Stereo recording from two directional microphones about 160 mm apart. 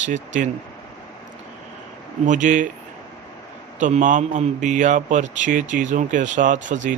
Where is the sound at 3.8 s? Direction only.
50° right (ahead or behind).